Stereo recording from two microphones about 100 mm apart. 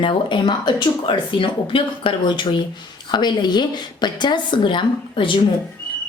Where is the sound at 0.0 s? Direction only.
55° left (ahead or behind).